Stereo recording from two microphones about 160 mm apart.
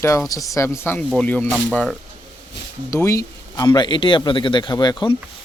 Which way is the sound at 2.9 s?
20° left (ahead or behind).